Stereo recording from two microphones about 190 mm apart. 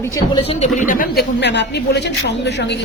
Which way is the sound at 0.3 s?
35° left (ahead or behind).